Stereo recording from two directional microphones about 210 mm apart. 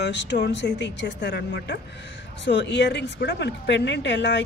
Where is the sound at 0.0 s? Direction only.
55° left (ahead or behind).